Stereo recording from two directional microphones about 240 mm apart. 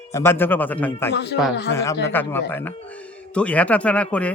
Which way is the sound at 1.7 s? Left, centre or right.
Centre.